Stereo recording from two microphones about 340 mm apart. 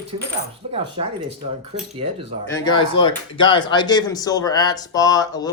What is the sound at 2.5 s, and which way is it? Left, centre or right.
Speech, centre.